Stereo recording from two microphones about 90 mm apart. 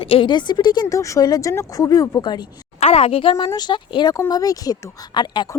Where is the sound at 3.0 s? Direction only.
85° left.